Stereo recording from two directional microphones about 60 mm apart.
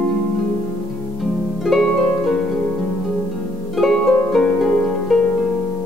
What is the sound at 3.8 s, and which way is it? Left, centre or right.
Harp, centre.